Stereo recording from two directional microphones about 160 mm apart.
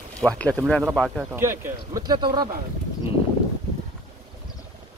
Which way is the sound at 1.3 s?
15° right (ahead or behind).